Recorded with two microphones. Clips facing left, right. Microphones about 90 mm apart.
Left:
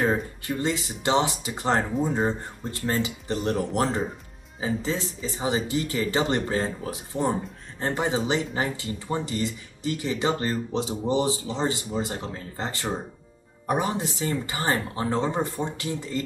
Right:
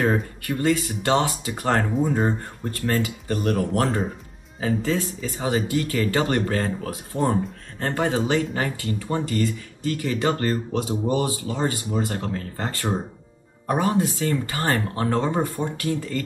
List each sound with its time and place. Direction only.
0.0 s speech: 20° left (ahead or behind)